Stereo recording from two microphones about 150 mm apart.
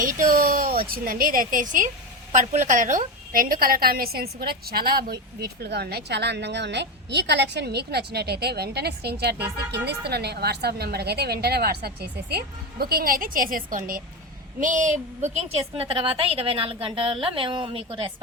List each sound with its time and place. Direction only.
0.0 s speech: 65° right (ahead or behind)
2.3 s a woman's voice: 55° right (ahead or behind)
3.3 s a woman's voice: 75° right (ahead or behind); by 6.3 s 90° right
7.3 s a woman's voice: 90° right; by 14.0 s 65° right (ahead or behind)
14.6 s a woman's voice: 55° right (ahead or behind)
15.8 s a woman's voice: 40° right (ahead or behind)